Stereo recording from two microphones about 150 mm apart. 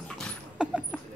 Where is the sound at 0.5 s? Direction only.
5° right (ahead or behind).